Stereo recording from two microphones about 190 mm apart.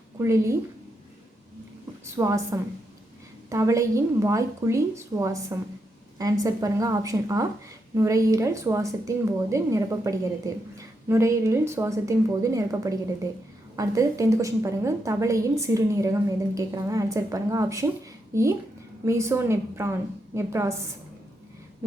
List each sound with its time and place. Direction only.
0.2 s a woman's voice: 15° right (ahead or behind)
2.1 s a woman's voice: 15° right (ahead or behind)